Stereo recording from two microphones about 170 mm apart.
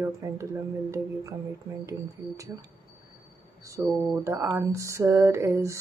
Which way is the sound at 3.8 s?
15° right (ahead or behind).